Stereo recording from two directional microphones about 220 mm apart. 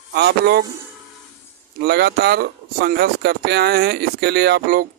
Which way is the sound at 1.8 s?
50° right (ahead or behind).